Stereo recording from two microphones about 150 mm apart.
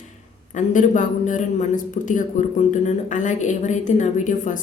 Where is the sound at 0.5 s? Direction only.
55° left (ahead or behind).